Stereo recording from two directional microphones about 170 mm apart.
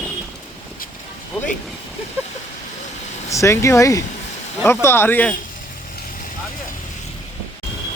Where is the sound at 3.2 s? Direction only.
20° left (ahead or behind).